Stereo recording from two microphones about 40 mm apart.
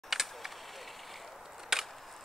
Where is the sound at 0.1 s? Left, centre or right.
Centre.